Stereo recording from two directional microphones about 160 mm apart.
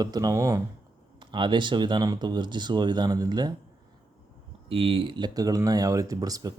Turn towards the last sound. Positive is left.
turn(degrees=-25)  # may be behind; listen again after turning